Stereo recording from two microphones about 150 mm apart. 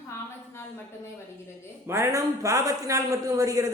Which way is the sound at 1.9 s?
20° right (ahead or behind).